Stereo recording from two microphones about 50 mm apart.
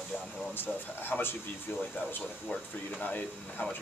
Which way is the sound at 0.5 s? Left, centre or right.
Left.